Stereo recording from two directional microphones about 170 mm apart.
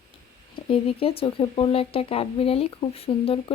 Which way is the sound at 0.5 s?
35° left (ahead or behind).